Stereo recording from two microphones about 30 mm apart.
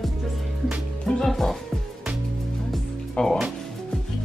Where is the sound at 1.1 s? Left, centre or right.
Left.